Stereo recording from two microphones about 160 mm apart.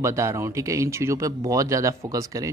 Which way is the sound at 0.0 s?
20° right (ahead or behind).